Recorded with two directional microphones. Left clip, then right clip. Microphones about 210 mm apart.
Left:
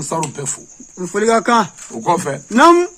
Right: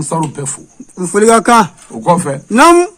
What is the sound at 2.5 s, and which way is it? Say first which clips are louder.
Speech: right 3 dB; 55° right (ahead or behind).